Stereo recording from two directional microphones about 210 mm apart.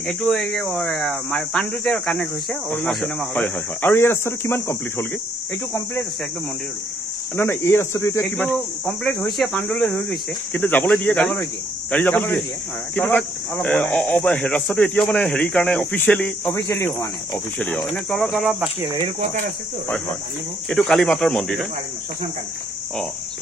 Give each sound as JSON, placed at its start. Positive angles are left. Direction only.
{"t": 0.0, "sound": "speech", "side_deg": 0}
{"t": 7.3, "sound": "speech", "side_deg": 10}
{"t": 18.8, "sound": "speech", "side_deg": -25}
{"t": 20.7, "sound": "speech", "side_deg": 0}